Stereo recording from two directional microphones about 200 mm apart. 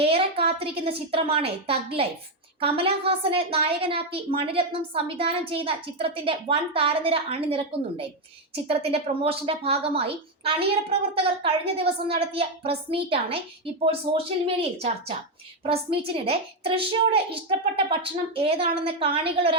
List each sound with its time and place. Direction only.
0.0 s a woman's voice: 30° right (ahead or behind)